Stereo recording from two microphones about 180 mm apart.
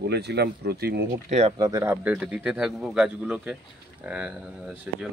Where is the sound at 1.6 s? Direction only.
20° right (ahead or behind).